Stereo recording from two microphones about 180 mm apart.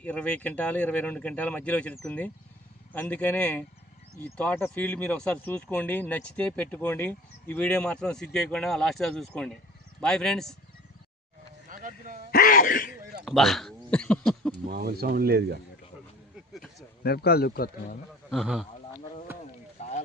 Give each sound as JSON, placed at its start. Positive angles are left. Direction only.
{"t": 0.0, "sound": "speech", "side_deg": 5}
{"t": 11.7, "sound": "a sound", "side_deg": -50}
{"t": 12.3, "sound": "sneeze", "side_deg": 55}
{"t": 13.2, "sound": "speech", "side_deg": 0}
{"t": 14.7, "sound": "speech", "side_deg": -60}
{"t": 17.0, "sound": "speech", "side_deg": 60}
{"t": 18.3, "sound": "speech", "side_deg": 0}
{"t": 19.8, "sound": "a sound", "side_deg": 40}